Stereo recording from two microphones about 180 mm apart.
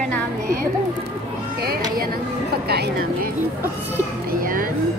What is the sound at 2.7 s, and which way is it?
Speech, 60° right (ahead or behind).